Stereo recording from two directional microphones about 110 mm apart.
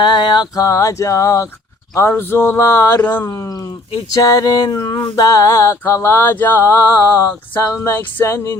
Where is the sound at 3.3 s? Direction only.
30° left (ahead or behind).